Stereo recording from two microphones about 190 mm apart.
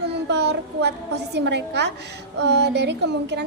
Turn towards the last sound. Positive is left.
turn(degrees=-65)  # may be behind; listen again after turning